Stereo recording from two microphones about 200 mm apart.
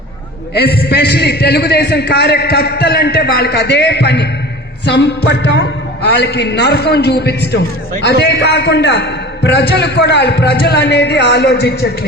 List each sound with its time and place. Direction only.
0.5 s a man's voice: 50° left (ahead or behind)